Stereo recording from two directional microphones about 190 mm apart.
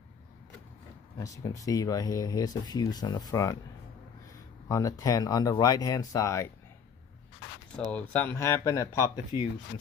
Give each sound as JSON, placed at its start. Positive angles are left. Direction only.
{"t": 1.1, "sound": "speech", "side_deg": 15}
{"t": 4.6, "sound": "speech", "side_deg": 20}
{"t": 7.7, "sound": "speech", "side_deg": 10}